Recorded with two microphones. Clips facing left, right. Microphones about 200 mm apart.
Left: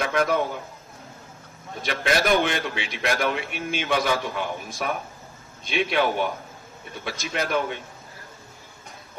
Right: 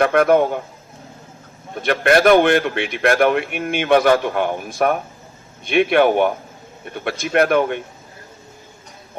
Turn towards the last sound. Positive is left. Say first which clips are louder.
# right 10 dB
turn(degrees=-60)  # may be behind; listen again after turning